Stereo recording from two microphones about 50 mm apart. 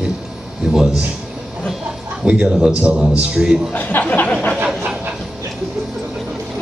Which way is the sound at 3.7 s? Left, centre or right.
Left.